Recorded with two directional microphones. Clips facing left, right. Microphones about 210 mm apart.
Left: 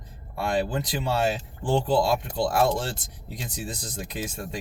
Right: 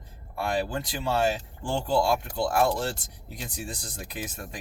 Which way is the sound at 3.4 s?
20° left (ahead or behind).